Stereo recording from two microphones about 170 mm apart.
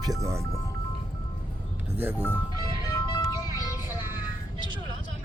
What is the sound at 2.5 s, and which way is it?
Music, 25° left (ahead or behind).